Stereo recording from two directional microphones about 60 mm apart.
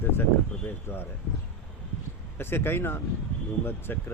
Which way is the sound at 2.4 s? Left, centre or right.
Left.